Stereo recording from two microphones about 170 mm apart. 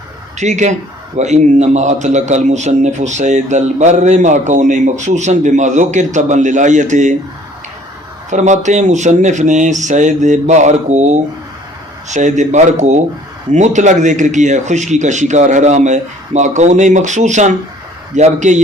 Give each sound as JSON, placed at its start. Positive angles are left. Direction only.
{"t": 0.3, "sound": "a man's voice", "side_deg": -45}
{"t": 8.3, "sound": "a man's voice", "side_deg": -45}